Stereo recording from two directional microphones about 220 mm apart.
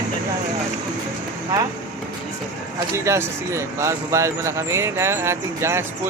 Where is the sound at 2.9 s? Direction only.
15° right (ahead or behind).